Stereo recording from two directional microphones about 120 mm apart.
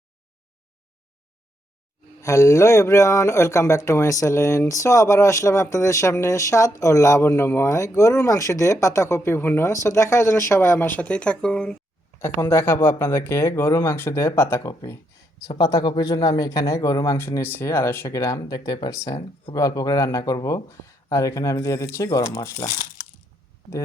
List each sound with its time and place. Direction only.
2.2 s speech: 25° left (ahead or behind); by 11.8 s 5° left (ahead or behind)
12.2 s speech: 20° left (ahead or behind)